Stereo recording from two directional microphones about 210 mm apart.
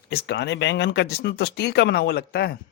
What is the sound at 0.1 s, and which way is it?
Speech, 50° left (ahead or behind).